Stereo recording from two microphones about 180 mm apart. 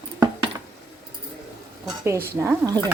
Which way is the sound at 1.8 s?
15° right (ahead or behind).